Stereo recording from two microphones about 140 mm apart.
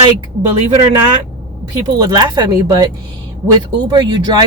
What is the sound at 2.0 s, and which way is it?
Speech, 30° right (ahead or behind).